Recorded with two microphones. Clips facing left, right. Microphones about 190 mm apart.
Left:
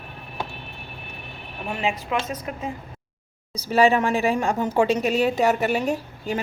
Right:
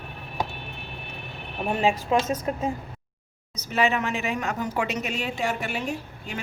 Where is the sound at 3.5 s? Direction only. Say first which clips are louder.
Left 6 dB; 35° left (ahead or behind).